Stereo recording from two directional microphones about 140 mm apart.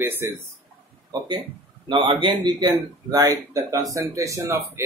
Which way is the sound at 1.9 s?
35° right (ahead or behind).